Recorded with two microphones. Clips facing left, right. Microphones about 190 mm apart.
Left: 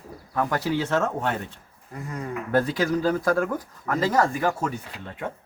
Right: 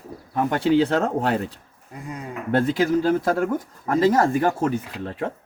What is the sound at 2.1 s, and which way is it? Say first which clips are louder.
Speech: right 2 dB; 25° right (ahead or behind).